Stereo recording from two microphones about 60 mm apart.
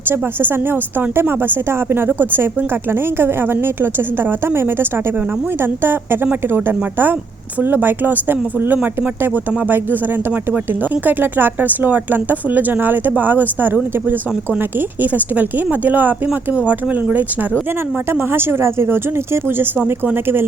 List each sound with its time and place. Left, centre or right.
0.1 s a woman's voice: right
11.0 s a woman's voice: right
14.8 s speech: right
18.1 s a woman's voice: right